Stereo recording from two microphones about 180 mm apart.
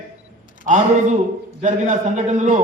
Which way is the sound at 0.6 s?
45° right (ahead or behind).